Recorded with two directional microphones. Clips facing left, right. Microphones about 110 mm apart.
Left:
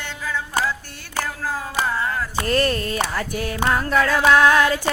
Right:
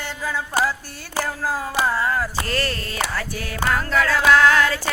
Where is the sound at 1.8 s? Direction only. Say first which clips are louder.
Right 2 dB; 35° right (ahead or behind).